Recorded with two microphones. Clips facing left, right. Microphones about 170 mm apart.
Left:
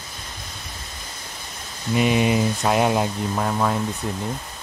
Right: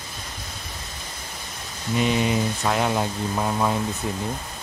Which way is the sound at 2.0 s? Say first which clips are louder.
Left 3 dB; 15° left (ahead or behind).